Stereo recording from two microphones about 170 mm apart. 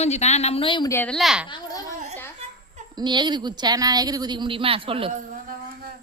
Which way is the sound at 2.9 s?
25° right (ahead or behind).